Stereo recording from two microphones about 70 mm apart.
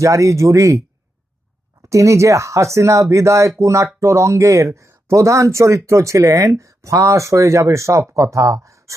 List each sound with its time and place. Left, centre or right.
0.0 s speech: right
1.8 s speech: right